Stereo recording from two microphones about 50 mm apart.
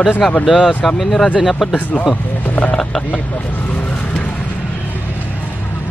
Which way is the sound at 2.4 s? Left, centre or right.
Left.